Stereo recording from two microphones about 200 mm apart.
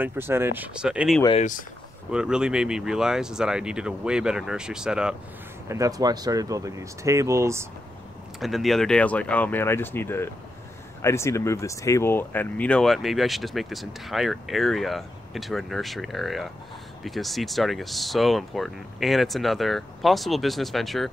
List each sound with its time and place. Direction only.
0.0 s speech: 10° right (ahead or behind)
5.7 s speech: 15° right (ahead or behind)
8.4 s speech: centre (ahead or behind)